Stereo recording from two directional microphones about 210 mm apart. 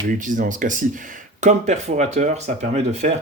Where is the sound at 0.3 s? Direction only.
40° right (ahead or behind).